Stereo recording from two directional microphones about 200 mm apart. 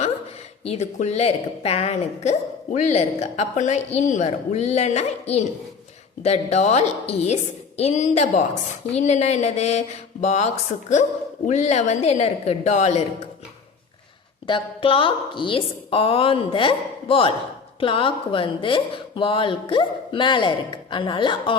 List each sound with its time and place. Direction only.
0.6 s a woman's voice: 35° left (ahead or behind)
14.4 s a woman's voice: 25° left (ahead or behind)